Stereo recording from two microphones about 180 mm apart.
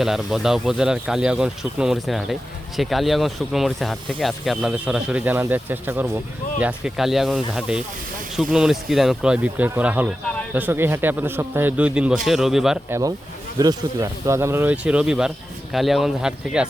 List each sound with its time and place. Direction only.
0.0 s a man's voice: centre (ahead or behind)
12.9 s a man's voice: 20° right (ahead or behind); by 16.6 s 5° right (ahead or behind)